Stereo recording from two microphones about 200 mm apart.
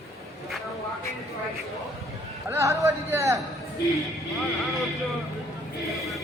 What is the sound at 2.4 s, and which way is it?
Speech, 15° right (ahead or behind).